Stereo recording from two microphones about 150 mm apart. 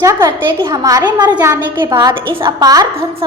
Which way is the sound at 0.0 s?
20° right (ahead or behind).